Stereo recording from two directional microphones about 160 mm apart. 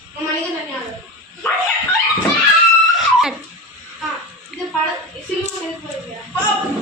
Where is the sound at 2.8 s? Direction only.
Centre (ahead or behind).